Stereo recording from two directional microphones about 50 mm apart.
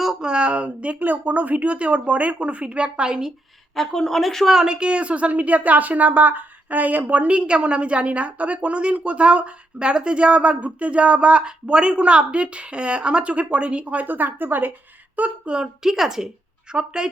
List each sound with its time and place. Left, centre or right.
0.2 s speech: centre
3.8 s speech: centre
4.4 s speech: centre; by 14.7 s right
15.4 s speech: centre